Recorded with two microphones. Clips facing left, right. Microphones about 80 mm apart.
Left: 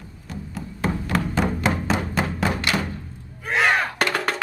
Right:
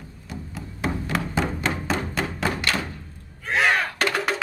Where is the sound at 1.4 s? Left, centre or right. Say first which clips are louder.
Left 3 dB; centre.